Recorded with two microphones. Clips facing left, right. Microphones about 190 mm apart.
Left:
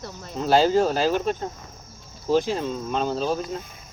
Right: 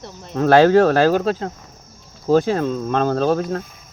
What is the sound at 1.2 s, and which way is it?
Speech, 90° right.